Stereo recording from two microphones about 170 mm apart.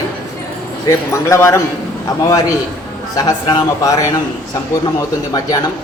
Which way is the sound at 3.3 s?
20° left (ahead or behind).